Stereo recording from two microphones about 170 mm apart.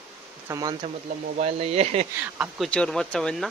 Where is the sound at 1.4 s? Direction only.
35° right (ahead or behind).